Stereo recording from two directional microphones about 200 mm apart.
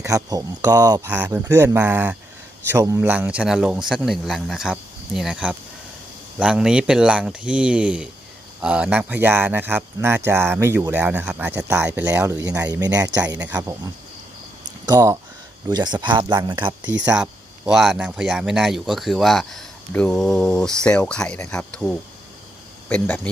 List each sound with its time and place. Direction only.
0.0 s speech: 15° right (ahead or behind)
1.1 s speech: 10° right (ahead or behind)
14.8 s speech: 20° right (ahead or behind)
16.8 s speech: 65° right (ahead or behind)
17.7 s speech: centre (ahead or behind)